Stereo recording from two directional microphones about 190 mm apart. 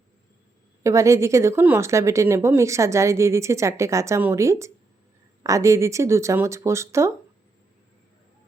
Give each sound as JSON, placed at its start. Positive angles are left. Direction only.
{"t": 0.8, "sound": "speech", "side_deg": -15}